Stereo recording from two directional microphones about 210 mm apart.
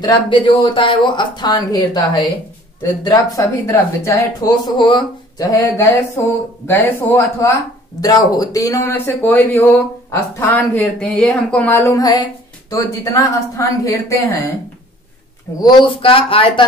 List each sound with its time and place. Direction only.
0.0 s speech: 25° left (ahead or behind)
15.6 s speech: 25° left (ahead or behind)